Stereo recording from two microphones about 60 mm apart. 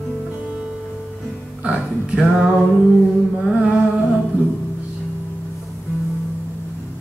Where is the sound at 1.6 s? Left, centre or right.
Centre.